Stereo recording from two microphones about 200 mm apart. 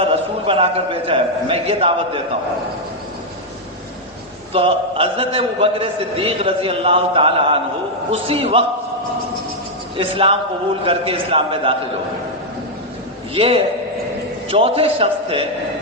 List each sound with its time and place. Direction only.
0.0 s a man's voice: 30° right (ahead or behind)
4.5 s a man's voice: 30° right (ahead or behind)
10.0 s a man's voice: 25° right (ahead or behind)
13.3 s a man's voice: 30° right (ahead or behind)